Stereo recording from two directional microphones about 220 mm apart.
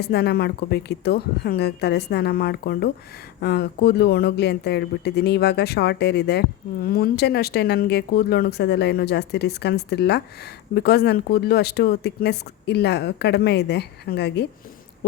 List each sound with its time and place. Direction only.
0.0 s speech: 45° left (ahead or behind)